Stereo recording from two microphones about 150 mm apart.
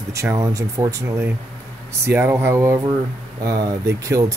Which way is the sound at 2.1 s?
15° right (ahead or behind).